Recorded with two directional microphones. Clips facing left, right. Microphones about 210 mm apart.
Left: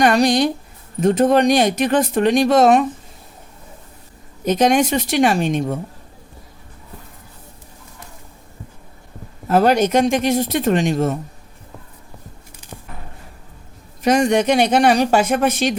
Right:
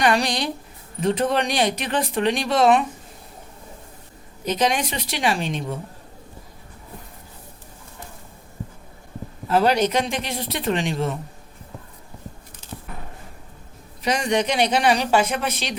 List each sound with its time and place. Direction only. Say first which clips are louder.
0.0 s speech: left 7 dB; 45° left (ahead or behind)
4.4 s speech: left 7 dB; 50° left (ahead or behind)
9.5 s speech: left 4 dB; 45° left (ahead or behind)
14.0 s speech: left 7 dB; 45° left (ahead or behind)